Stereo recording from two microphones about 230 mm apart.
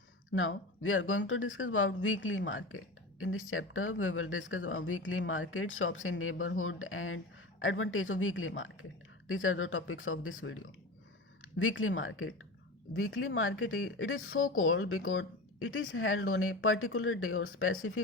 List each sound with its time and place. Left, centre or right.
0.3 s speech: left